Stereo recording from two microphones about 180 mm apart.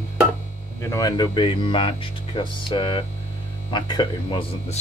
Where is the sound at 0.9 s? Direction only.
20° left (ahead or behind).